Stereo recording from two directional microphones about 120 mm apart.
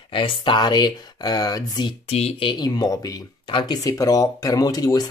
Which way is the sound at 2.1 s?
60° left (ahead or behind).